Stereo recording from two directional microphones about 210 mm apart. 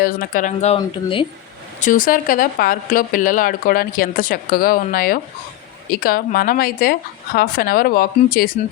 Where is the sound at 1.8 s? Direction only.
40° left (ahead or behind).